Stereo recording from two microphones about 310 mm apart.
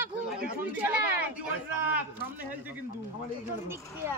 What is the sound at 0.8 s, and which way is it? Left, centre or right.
Speech, centre.